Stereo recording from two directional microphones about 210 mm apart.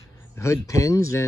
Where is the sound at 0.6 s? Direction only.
15° left (ahead or behind).